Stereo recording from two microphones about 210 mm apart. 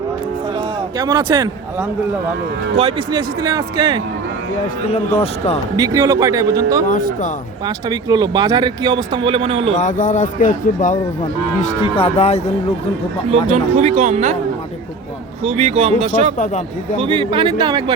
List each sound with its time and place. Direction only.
0.9 s speech: 20° right (ahead or behind)
2.7 s speech: 25° right (ahead or behind)
5.7 s speech: 15° right (ahead or behind)
6.8 s speech: 40° left (ahead or behind)
7.9 s speech: 20° right (ahead or behind)
9.7 s speech: 35° left (ahead or behind)
11.6 s speech: 25° left (ahead or behind)
13.5 s speech: 30° right (ahead or behind)
15.4 s speech: 30° right (ahead or behind)